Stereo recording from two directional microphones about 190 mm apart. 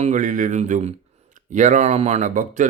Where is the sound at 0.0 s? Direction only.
40° right (ahead or behind).